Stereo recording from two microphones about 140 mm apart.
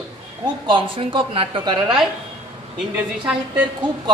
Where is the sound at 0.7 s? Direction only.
35° right (ahead or behind).